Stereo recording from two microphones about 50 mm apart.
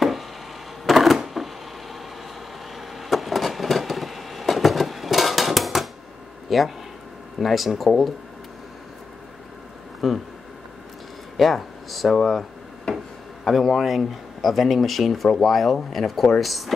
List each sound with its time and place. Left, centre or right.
0.8 s a sound: centre
3.0 s vehicle: centre
6.5 s speech: centre
10.0 s speech: centre
11.3 s speech: centre
12.9 s a sound: centre
13.4 s speech: centre